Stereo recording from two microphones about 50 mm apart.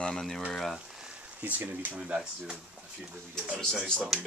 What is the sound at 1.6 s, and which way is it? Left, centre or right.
Speech, right.